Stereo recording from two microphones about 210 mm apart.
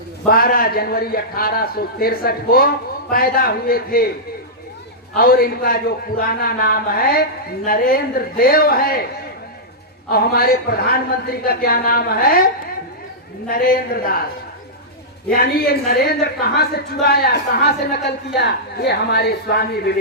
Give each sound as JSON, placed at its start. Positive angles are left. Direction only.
{"t": 0.3, "sound": "a man's voice", "side_deg": 45}
{"t": 5.1, "sound": "a man's voice", "side_deg": 45}
{"t": 10.1, "sound": "a man's voice", "side_deg": 45}
{"t": 13.5, "sound": "a man's voice", "side_deg": 45}
{"t": 15.3, "sound": "a man's voice", "side_deg": 45}